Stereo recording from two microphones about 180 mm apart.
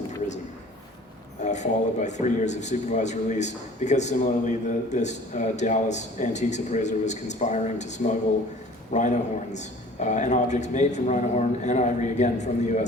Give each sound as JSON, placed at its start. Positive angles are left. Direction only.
{"t": 1.4, "sound": "speech", "side_deg": 40}